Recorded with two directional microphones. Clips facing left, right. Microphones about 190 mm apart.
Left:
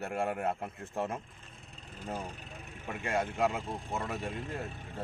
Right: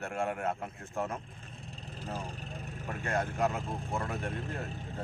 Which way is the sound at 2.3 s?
35° right (ahead or behind).